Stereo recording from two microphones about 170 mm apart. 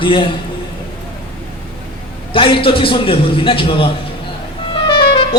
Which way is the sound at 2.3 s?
30° left (ahead or behind).